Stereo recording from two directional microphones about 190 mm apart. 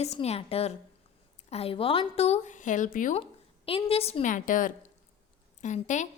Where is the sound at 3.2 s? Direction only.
30° left (ahead or behind).